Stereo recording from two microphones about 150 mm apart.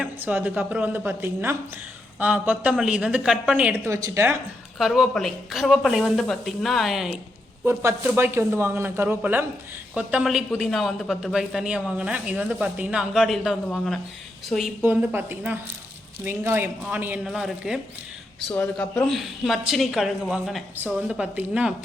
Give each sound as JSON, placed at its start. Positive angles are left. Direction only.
{"t": 0.0, "sound": "a woman's voice", "side_deg": -10}
{"t": 4.8, "sound": "a man's voice", "side_deg": 0}
{"t": 7.6, "sound": "a woman's voice", "side_deg": -15}
{"t": 14.8, "sound": "a woman's voice", "side_deg": -15}
{"t": 18.4, "sound": "a man's voice", "side_deg": 5}